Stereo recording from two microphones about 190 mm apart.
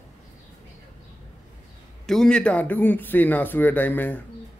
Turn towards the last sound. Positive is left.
turn(degrees=10)  # may be behind; listen again after turning